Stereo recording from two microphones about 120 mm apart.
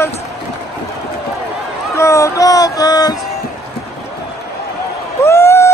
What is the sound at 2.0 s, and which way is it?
Music, 25° left (ahead or behind).